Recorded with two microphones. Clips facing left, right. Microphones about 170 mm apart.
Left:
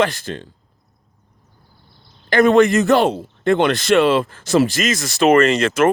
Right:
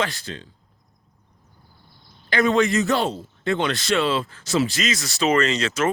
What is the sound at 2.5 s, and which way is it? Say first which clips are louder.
Speech: left 7 dB; 55° left (ahead or behind).